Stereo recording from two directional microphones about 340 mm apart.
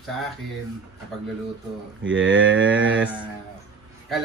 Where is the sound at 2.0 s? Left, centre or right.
Right.